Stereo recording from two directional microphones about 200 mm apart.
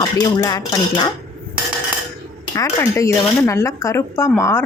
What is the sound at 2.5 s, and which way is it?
Speech, 15° left (ahead or behind).